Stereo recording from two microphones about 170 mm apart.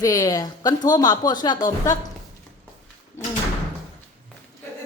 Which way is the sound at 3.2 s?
15° left (ahead or behind).